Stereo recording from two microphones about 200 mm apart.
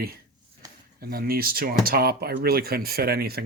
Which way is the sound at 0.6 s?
20° right (ahead or behind).